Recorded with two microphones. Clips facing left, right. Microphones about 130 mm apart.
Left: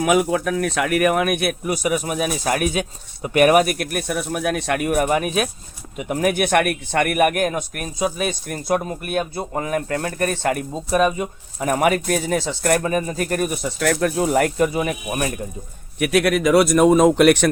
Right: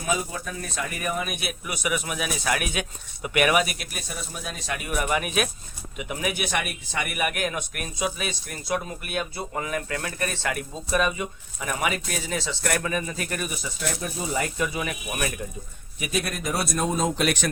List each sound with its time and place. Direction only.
0.0 s speech: 90° left; by 1.5 s 60° left (ahead or behind)
1.6 s a man's voice: 40° left (ahead or behind)
5.0 s a man's voice: 35° left (ahead or behind); by 14.5 s 65° left (ahead or behind)
14.6 s a man's voice: 40° left (ahead or behind)
16.0 s speech: 75° left (ahead or behind)